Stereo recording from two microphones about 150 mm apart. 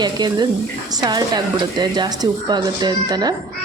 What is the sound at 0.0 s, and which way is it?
A woman's voice, 30° right (ahead or behind).